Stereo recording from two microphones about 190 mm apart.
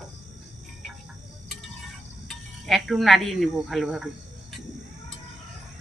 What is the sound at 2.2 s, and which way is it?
Speech, centre (ahead or behind).